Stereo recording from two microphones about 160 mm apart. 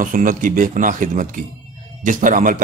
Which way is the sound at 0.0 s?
55° right (ahead or behind).